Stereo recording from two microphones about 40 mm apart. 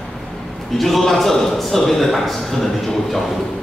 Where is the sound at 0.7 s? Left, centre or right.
Centre.